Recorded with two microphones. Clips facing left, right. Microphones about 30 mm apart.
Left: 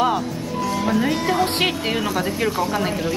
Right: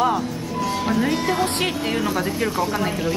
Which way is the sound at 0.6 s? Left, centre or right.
Centre.